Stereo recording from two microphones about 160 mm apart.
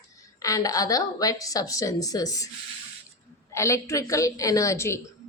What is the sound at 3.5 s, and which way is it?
Speech, 20° left (ahead or behind).